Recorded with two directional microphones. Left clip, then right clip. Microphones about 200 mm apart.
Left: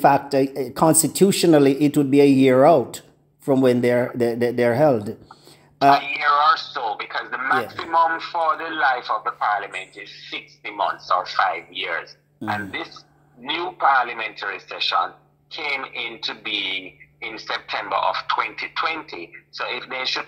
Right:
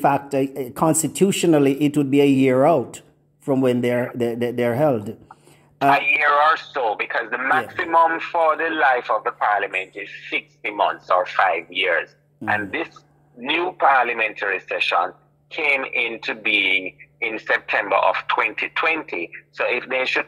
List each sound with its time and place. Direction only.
0.0 s speech: centre (ahead or behind)
5.9 s speech: 30° right (ahead or behind)